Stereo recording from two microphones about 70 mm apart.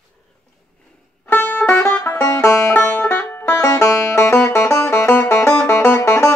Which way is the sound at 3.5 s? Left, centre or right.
Left.